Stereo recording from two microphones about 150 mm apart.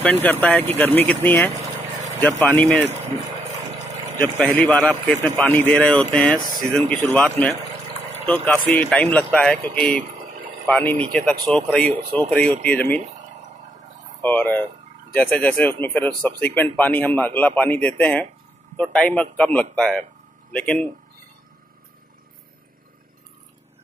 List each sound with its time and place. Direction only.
0.0 s a man's voice: 10° left (ahead or behind)
4.4 s a man's voice: 10° left (ahead or behind)
14.2 s a man's voice: 10° left (ahead or behind)